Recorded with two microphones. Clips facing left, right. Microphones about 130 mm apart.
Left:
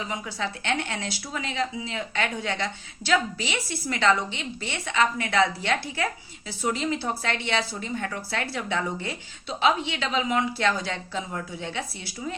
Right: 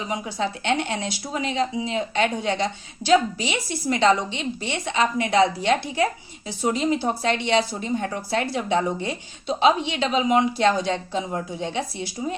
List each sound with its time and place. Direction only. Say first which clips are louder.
0.1 s speech: right 5 dB; 20° right (ahead or behind)